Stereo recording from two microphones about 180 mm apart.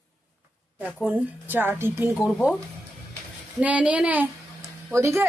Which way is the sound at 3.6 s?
5° right (ahead or behind).